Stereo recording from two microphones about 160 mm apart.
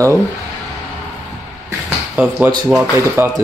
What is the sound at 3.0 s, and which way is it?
Speech, 15° right (ahead or behind).